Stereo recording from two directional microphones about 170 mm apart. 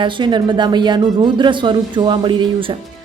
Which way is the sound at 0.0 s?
25° right (ahead or behind).